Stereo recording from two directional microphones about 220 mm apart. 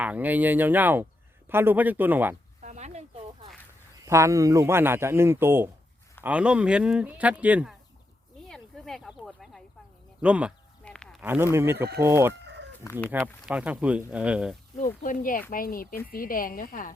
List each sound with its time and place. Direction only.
0.0 s a man's voice: 5° right (ahead or behind)
2.6 s a sound: 35° right (ahead or behind)
4.0 s a man's voice: 15° right (ahead or behind)
8.4 s a sound: centre (ahead or behind)
10.2 s speech: 5° right (ahead or behind)
10.8 s a sound: 5° left (ahead or behind)
11.2 s a man's voice: 10° right (ahead or behind)
12.8 s speech: 10° left (ahead or behind)
13.1 s speech: 5° right (ahead or behind)
14.8 s a woman's voice: 35° left (ahead or behind)